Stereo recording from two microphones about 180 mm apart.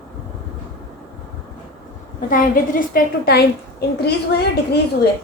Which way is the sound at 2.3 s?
50° left (ahead or behind).